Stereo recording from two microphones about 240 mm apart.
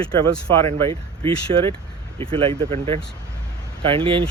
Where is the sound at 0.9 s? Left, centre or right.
Right.